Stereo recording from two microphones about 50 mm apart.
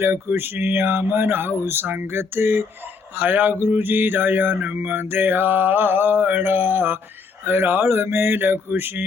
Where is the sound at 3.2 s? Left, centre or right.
Right.